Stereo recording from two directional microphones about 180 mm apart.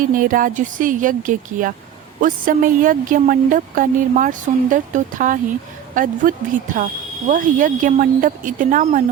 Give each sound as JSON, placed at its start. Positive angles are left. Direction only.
{"t": 0.0, "sound": "a woman's voice", "side_deg": -50}